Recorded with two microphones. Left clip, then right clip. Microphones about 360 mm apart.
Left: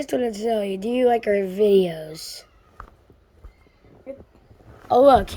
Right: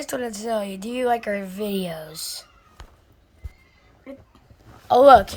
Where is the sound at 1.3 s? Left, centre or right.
Right.